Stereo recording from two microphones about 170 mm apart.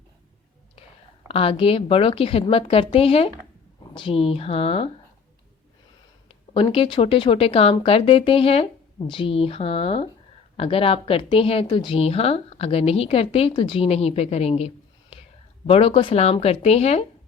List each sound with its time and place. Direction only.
1.3 s a woman's voice: 35° left (ahead or behind)
6.5 s a woman's voice: 30° left (ahead or behind)
15.1 s whispering: 35° left (ahead or behind)
15.6 s a woman's voice: 35° left (ahead or behind)